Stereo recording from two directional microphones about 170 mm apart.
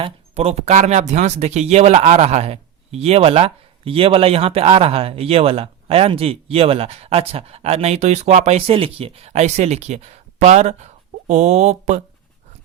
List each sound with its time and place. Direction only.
0.0 s speech: 35° right (ahead or behind)